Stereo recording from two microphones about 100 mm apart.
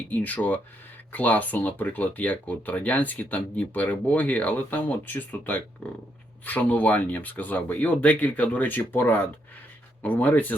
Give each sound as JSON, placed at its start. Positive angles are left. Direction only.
{"t": 0.1, "sound": "speech", "side_deg": 15}